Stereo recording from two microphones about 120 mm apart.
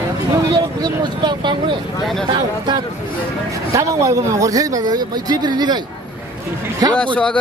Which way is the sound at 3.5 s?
25° right (ahead or behind).